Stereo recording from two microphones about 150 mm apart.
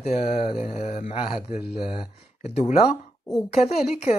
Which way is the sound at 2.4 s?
50° left (ahead or behind).